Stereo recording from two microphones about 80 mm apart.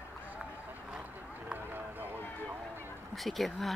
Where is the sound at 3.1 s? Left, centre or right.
Centre.